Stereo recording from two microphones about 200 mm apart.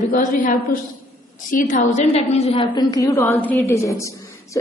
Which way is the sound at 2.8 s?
15° left (ahead or behind).